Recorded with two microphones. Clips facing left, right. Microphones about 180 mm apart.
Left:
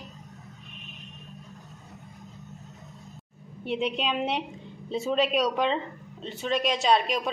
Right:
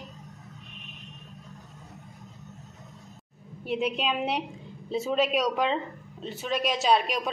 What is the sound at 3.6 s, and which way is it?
A woman's voice, centre (ahead or behind).